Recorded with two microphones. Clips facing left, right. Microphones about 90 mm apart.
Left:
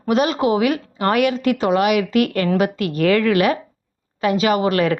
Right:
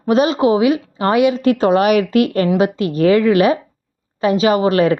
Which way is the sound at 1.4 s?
35° right (ahead or behind).